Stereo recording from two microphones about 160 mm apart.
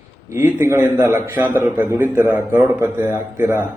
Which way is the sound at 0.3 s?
15° right (ahead or behind).